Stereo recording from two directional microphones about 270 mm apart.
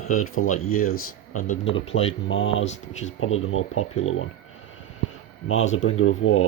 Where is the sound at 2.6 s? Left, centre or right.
Left.